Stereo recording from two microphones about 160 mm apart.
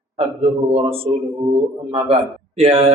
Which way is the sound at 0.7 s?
35° right (ahead or behind).